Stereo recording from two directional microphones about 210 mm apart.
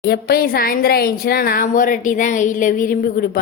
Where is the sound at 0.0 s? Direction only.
50° left (ahead or behind).